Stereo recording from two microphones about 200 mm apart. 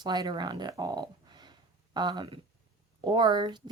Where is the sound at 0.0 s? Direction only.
20° right (ahead or behind).